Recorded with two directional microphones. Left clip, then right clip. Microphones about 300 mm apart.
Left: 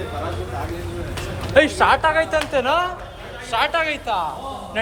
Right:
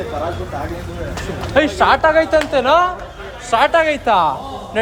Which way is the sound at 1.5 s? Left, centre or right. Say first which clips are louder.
Right 2 dB; centre.